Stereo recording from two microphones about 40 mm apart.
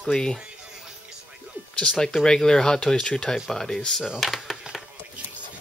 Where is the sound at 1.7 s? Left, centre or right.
Centre.